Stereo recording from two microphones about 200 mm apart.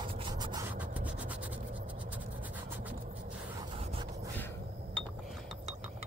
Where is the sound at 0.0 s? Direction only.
25° right (ahead or behind).